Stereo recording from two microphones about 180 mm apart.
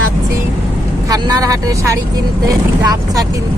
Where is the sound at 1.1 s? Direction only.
20° right (ahead or behind).